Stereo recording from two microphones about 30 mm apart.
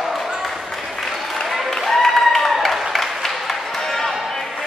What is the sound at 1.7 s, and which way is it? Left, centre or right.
Applause, centre.